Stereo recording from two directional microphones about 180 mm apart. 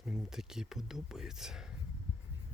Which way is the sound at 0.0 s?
5° right (ahead or behind).